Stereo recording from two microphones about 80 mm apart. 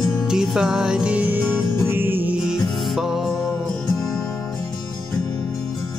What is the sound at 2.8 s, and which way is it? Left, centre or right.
Music, centre.